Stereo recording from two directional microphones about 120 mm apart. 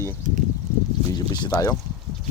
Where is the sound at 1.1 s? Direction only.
30° left (ahead or behind).